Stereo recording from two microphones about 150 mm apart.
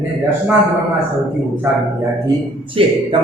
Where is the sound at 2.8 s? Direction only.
35° right (ahead or behind).